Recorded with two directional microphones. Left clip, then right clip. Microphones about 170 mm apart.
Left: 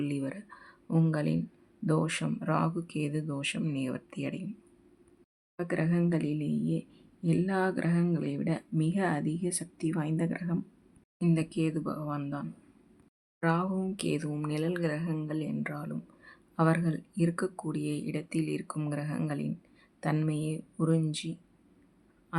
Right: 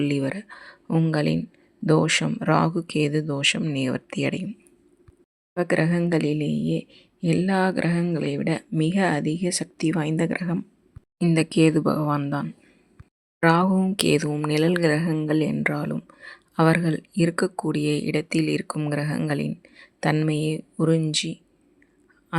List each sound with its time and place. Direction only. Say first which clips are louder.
0.0 s speech: right 10 dB; 30° right (ahead or behind)
5.5 s speech: right 9 dB; 35° right (ahead or behind)
13.4 s speech: right 11 dB; 40° right (ahead or behind)